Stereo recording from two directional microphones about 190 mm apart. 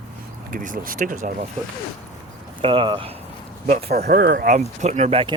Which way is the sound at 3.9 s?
55° right (ahead or behind).